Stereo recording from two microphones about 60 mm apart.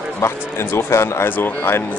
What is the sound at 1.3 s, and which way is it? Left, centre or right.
Speech, left.